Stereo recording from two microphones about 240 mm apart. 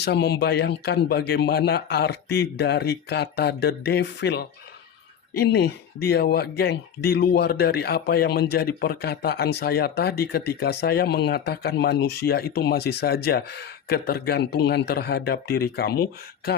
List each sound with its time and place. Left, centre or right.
0.0 s speech: left